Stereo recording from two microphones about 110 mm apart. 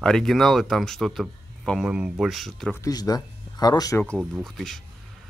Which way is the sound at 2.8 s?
35° left (ahead or behind).